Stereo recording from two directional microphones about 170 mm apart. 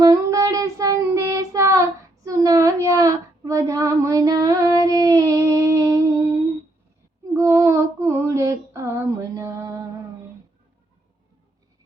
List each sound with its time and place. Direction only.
0.0 s child singing: 20° right (ahead or behind)
7.3 s female singing: 15° right (ahead or behind)